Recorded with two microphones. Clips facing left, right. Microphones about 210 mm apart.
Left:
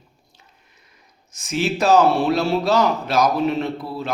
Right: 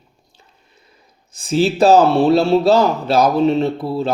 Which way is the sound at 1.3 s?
30° right (ahead or behind).